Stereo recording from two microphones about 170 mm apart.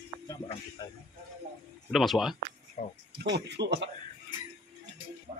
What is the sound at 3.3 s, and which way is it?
Speech, 80° right.